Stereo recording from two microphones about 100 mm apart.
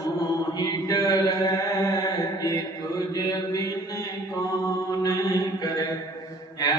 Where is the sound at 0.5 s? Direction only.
35° left (ahead or behind).